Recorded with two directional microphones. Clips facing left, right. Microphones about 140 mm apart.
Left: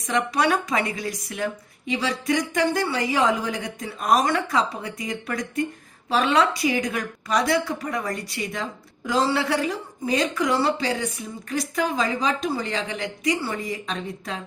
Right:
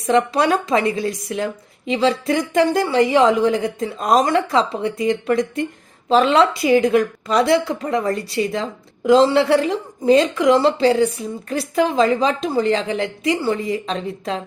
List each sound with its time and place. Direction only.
0.0 s a woman's voice: 30° right (ahead or behind)